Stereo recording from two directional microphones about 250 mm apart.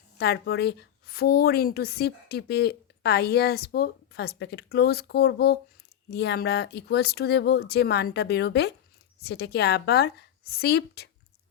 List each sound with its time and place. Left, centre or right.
0.2 s a woman's voice: left